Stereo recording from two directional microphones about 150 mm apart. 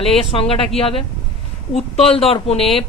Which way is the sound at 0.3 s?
40° left (ahead or behind).